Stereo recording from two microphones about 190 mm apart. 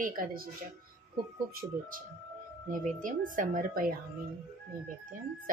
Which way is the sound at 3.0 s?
45° right (ahead or behind).